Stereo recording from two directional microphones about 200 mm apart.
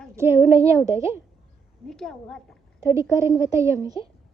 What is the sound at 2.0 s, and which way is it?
Speech, centre (ahead or behind).